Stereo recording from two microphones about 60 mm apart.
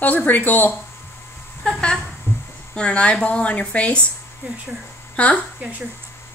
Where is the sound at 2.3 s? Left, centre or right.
Left.